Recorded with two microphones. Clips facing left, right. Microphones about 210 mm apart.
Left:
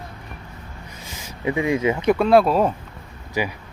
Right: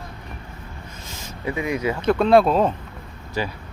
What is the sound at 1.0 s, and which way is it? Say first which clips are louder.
Speech: left 3 dB; 15° left (ahead or behind).